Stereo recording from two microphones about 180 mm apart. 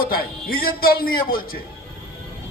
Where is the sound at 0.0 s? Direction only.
55° left (ahead or behind).